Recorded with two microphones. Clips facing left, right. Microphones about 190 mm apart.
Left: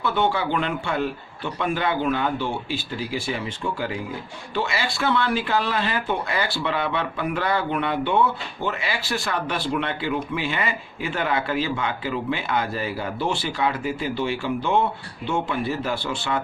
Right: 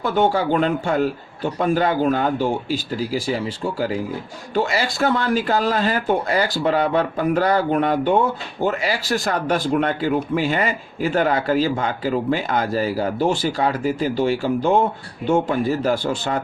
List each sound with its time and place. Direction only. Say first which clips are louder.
0.0 s speech: right 4 dB; 40° right (ahead or behind)